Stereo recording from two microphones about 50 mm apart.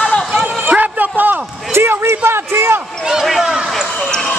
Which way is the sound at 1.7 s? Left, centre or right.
Right.